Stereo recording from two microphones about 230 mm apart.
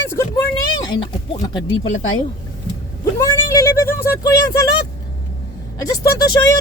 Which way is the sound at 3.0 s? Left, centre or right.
Centre.